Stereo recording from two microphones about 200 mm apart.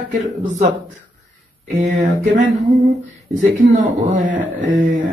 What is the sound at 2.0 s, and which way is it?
Speech, 40° right (ahead or behind).